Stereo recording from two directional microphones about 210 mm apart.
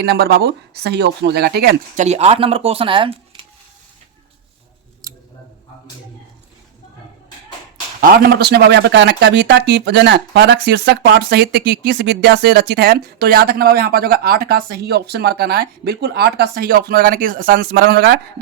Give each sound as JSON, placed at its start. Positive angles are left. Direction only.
{"t": 0.0, "sound": "speech", "side_deg": -50}
{"t": 2.0, "sound": "speech", "side_deg": -30}
{"t": 5.0, "sound": "scissors", "side_deg": -20}
{"t": 8.0, "sound": "speech", "side_deg": -45}